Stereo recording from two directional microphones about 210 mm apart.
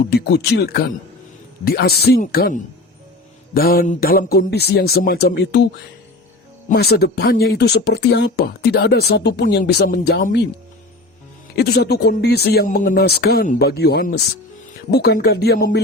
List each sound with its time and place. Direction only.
0.0 s speech: 50° left (ahead or behind)
6.7 s speech: 50° left (ahead or behind)
11.5 s speech: 50° left (ahead or behind)